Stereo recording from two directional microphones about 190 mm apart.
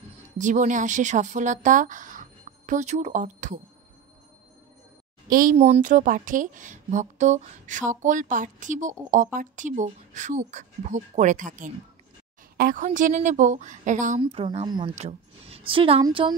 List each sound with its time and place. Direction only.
0.4 s speech: 40° right (ahead or behind)
5.3 s speech: 45° right (ahead or behind)
14.2 s a woman's voice: 30° right (ahead or behind)